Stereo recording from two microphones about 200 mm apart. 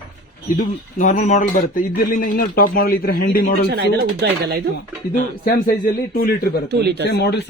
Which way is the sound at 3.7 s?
55° right (ahead or behind).